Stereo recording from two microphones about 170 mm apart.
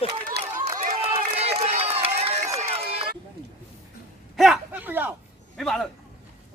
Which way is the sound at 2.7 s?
35° right (ahead or behind).